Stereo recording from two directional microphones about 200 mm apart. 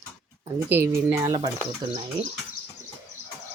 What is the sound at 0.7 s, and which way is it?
Speech, 15° right (ahead or behind).